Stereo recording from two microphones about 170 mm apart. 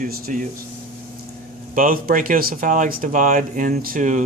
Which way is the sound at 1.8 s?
55° right (ahead or behind).